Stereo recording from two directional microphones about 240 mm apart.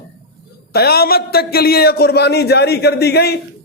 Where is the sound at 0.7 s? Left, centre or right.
Left.